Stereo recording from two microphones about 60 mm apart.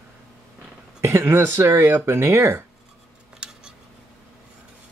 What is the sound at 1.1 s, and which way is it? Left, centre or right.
Speech, right.